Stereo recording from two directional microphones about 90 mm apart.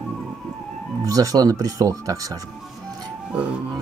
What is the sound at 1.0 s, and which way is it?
Speech, 40° right (ahead or behind).